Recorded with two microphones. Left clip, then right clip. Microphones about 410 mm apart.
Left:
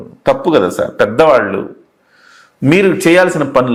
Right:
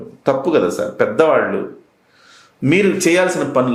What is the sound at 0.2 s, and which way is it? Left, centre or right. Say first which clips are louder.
Speech: left 4 dB; left.